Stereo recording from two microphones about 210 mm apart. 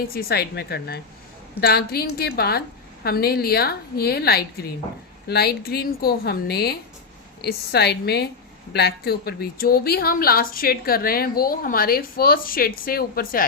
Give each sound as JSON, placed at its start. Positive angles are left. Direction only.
{"t": 0.1, "sound": "a woman's voice", "side_deg": 45}